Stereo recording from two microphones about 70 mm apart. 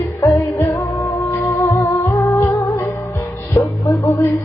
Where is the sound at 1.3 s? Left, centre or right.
Left.